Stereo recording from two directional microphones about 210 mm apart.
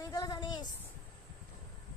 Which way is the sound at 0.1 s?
20° left (ahead or behind).